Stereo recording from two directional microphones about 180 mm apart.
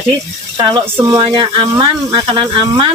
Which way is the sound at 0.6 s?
30° right (ahead or behind).